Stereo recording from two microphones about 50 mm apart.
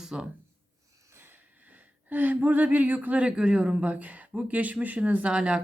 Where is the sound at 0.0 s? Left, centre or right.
Centre.